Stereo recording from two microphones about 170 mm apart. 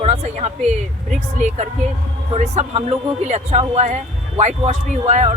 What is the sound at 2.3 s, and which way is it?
Speech, 40° right (ahead or behind).